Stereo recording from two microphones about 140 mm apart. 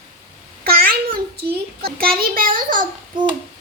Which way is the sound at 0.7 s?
90° right.